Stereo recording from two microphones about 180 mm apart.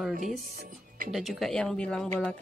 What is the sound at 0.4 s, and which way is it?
Speech, 50° right (ahead or behind).